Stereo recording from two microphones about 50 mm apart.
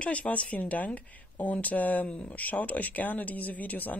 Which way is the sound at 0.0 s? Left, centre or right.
Left.